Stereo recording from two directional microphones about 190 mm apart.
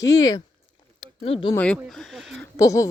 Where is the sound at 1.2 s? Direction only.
30° left (ahead or behind).